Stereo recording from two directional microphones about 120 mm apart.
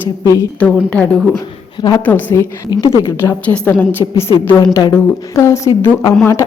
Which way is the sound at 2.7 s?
35° left (ahead or behind).